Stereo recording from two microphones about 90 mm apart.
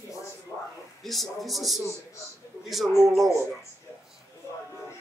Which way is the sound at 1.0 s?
Centre (ahead or behind).